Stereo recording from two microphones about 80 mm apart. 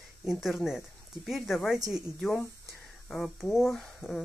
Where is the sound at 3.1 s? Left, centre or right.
Centre.